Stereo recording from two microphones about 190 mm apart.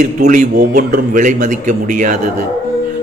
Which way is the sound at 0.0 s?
40° right (ahead or behind).